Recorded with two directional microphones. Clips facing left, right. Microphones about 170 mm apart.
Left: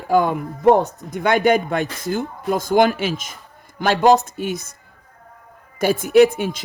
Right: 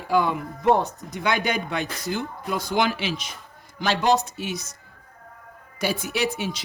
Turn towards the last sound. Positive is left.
turn(degrees=50)  # may be behind; listen again after turning